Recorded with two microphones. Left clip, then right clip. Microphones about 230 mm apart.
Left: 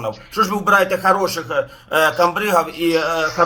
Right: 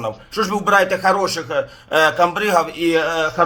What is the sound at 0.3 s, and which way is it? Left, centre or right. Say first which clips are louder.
A man's voice: left 2 dB; centre.